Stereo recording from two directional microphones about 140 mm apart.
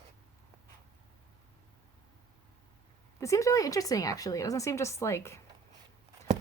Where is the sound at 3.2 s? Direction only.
20° left (ahead or behind).